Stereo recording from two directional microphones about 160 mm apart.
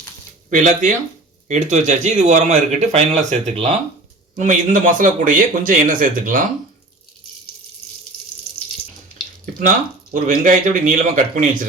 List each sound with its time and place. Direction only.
0.5 s speech: 55° right (ahead or behind)
4.4 s speech: 55° right (ahead or behind)
10.2 s speech: 55° right (ahead or behind)